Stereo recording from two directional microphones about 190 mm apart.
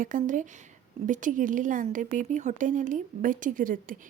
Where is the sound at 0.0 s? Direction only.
45° right (ahead or behind).